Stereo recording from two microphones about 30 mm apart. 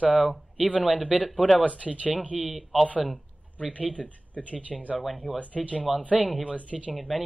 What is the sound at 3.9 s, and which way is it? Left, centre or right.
Speech, left.